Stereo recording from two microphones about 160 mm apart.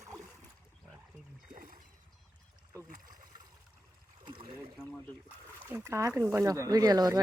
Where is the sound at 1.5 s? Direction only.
60° right (ahead or behind).